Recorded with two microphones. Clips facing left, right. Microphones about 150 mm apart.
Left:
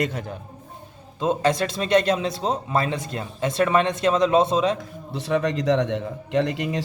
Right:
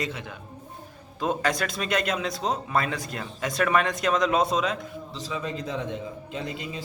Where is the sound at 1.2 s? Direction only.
25° left (ahead or behind).